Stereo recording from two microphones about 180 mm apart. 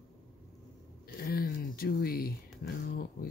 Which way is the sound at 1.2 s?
55° left (ahead or behind).